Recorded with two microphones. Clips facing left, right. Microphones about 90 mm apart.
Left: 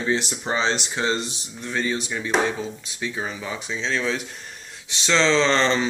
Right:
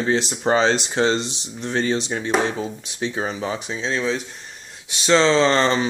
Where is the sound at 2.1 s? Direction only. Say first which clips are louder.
Right 3 dB; 45° right (ahead or behind).